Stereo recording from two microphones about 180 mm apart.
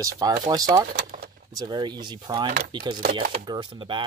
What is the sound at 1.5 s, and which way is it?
Speech, 25° right (ahead or behind).